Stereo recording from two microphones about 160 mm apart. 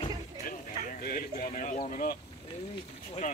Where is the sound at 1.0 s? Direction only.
65° left (ahead or behind).